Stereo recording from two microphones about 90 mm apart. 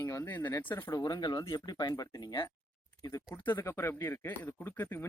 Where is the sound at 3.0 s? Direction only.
40° left (ahead or behind).